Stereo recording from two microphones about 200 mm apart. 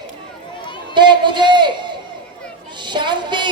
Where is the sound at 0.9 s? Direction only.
20° right (ahead or behind).